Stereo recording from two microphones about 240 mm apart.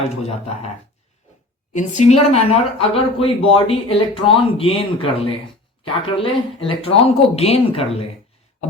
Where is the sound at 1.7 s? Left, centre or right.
Left.